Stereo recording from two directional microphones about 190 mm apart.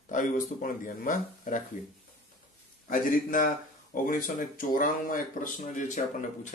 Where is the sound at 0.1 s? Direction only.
45° left (ahead or behind).